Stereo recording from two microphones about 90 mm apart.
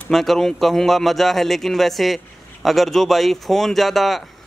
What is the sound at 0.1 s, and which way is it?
A man's voice, 5° left (ahead or behind).